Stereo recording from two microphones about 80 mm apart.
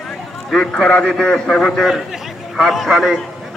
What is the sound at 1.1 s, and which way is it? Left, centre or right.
A man's voice, centre.